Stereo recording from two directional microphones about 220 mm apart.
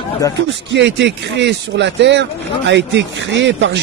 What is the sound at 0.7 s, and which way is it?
A man's voice, 55° right (ahead or behind).